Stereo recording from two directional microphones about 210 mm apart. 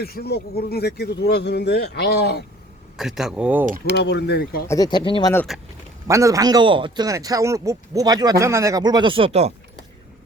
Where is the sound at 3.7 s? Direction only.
45° right (ahead or behind).